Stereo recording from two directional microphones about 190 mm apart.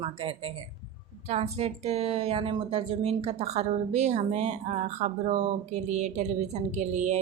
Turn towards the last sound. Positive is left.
turn(degrees=-35)  # may be behind; listen again after turning